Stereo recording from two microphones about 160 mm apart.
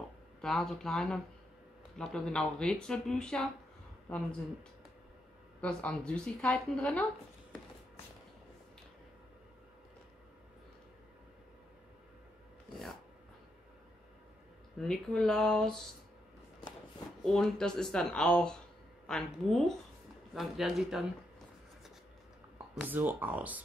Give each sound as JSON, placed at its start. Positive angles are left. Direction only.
{"t": 0.4, "sound": "speech", "side_deg": 0}
{"t": 5.6, "sound": "speech", "side_deg": 5}
{"t": 14.8, "sound": "speech", "side_deg": 5}
{"t": 17.2, "sound": "speech", "side_deg": 5}
{"t": 22.8, "sound": "speech", "side_deg": -10}